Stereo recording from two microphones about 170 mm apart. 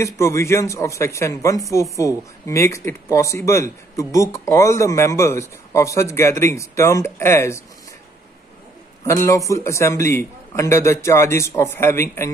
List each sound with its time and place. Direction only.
0.0 s speech: 15° left (ahead or behind)
9.0 s speech: 20° left (ahead or behind)